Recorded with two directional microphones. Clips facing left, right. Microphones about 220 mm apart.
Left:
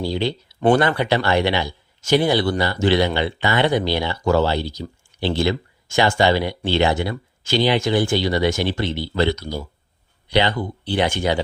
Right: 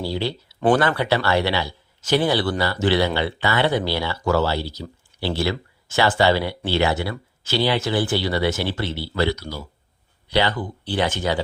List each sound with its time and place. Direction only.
0.0 s speech: 20° left (ahead or behind)